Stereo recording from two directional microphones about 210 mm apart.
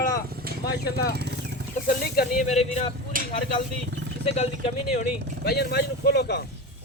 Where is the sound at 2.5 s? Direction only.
30° left (ahead or behind).